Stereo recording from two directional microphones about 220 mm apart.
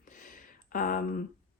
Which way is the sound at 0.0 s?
35° left (ahead or behind).